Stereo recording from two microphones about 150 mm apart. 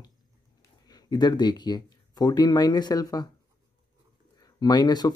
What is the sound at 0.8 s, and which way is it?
Speech, 25° left (ahead or behind).